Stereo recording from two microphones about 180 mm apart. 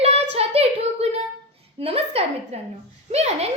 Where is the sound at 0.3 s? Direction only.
35° right (ahead or behind).